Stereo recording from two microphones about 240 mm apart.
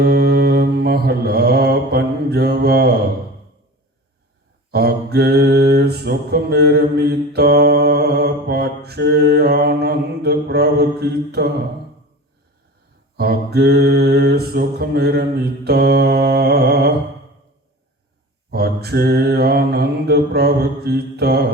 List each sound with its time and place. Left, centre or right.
0.0 s mantra: right
4.7 s mantra: right
13.1 s mantra: right
18.5 s mantra: right